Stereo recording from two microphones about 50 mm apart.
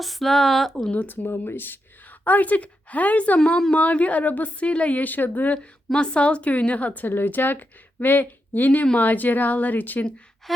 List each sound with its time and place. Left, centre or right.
0.0 s speech: centre
0.9 s speech: left
2.2 s a woman's voice: left
5.9 s speech: centre; by 10.1 s left